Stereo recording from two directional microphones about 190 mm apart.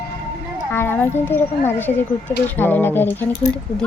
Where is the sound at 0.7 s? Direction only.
10° left (ahead or behind).